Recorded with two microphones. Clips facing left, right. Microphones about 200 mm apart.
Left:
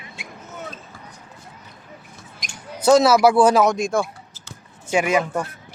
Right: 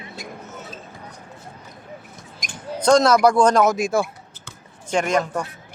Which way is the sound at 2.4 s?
45° right (ahead or behind).